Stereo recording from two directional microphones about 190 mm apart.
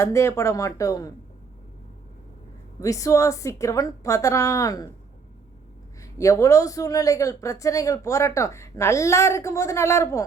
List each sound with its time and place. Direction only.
0.0 s speech: 15° left (ahead or behind)
2.8 s speech: 15° left (ahead or behind)
6.0 s speech: 15° left (ahead or behind)